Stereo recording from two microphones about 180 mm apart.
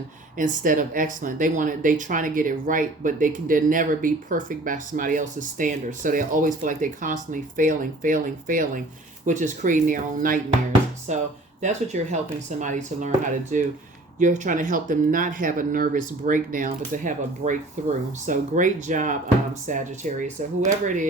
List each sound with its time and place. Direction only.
0.3 s speech: 50° right (ahead or behind)